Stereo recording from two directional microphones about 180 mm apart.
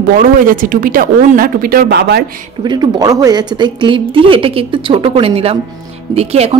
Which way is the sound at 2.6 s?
20° right (ahead or behind).